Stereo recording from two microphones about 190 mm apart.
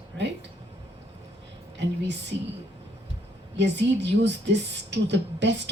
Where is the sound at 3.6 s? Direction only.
65° right (ahead or behind).